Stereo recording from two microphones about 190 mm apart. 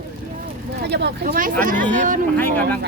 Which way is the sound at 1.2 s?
45° right (ahead or behind).